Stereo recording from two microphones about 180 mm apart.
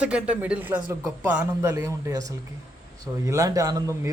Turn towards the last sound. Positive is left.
turn(degrees=-20)  # may be behind; listen again after turning